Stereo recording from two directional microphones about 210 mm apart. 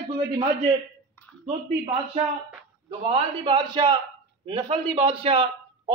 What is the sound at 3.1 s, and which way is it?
A man's voice, 25° right (ahead or behind).